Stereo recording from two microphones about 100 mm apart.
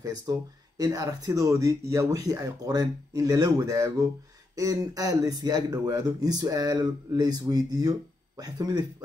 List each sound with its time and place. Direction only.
0.0 s speech: 40° right (ahead or behind)